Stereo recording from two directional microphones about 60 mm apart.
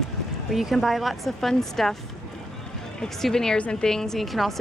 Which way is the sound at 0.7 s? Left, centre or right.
Centre.